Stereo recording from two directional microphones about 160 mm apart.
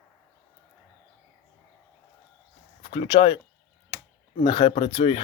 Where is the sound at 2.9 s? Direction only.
35° left (ahead or behind).